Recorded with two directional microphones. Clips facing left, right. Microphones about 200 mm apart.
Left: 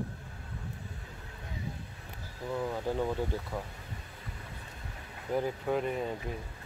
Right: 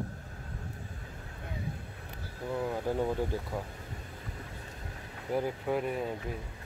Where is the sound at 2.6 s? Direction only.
10° right (ahead or behind).